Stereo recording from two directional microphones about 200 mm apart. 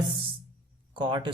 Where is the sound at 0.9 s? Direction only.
25° right (ahead or behind).